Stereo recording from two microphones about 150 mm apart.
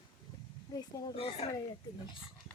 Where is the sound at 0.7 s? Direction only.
25° left (ahead or behind).